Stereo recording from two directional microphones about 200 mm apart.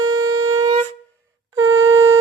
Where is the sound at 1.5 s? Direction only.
90° right.